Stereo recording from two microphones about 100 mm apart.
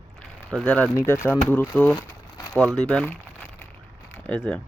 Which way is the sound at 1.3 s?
15° left (ahead or behind).